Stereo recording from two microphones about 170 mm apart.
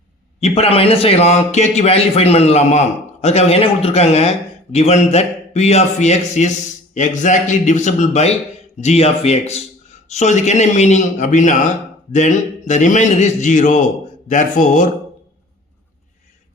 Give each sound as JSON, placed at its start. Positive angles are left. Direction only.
{"t": 0.3, "sound": "a man's voice", "side_deg": 40}